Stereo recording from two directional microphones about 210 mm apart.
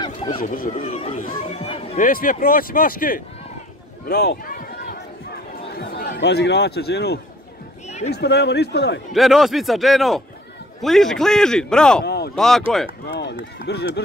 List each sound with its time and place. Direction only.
0.0 s a sound: 25° left (ahead or behind)
0.4 s speech: 45° left (ahead or behind)
0.7 s speech: 30° left (ahead or behind)
2.0 s speech: 40° left (ahead or behind)
4.0 s run: 45° left (ahead or behind)
5.8 s speech: 50° left (ahead or behind)
9.1 s a man's voice: centre (ahead or behind)
12.0 s a sound: 50° left (ahead or behind)
12.4 s a man's voice: centre (ahead or behind)
13.0 s speech: 55° left (ahead or behind)